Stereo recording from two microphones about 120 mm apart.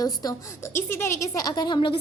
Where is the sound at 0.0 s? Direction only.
30° left (ahead or behind).